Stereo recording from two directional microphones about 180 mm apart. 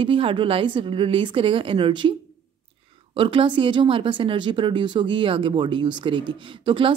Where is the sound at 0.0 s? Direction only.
30° right (ahead or behind).